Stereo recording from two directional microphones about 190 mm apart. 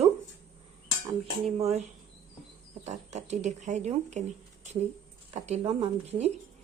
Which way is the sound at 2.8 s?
35° right (ahead or behind).